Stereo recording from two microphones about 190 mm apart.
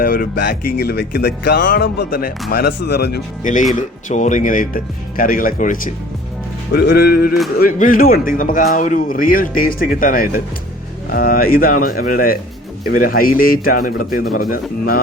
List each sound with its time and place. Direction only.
0.0 s speech: 55° left (ahead or behind)
6.7 s music: 55° left (ahead or behind)
7.6 s speech: 50° left (ahead or behind)